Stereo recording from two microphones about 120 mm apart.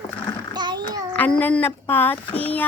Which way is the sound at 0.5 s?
35° right (ahead or behind).